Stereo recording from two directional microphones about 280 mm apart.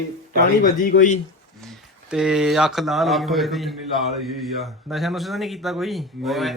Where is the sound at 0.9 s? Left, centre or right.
Left.